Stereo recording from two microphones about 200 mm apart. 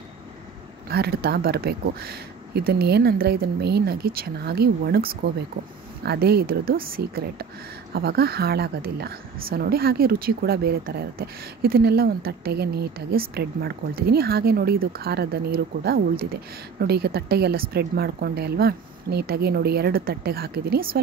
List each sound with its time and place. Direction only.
0.8 s speech: 50° right (ahead or behind)